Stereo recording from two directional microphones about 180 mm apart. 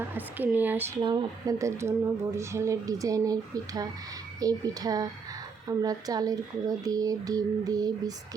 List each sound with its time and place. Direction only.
0.1 s speech: 10° right (ahead or behind)
1.0 s speech: 20° right (ahead or behind)